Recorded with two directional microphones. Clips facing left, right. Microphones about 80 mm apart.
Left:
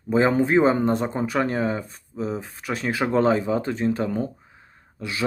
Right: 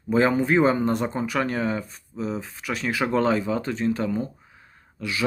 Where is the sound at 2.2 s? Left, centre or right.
Left.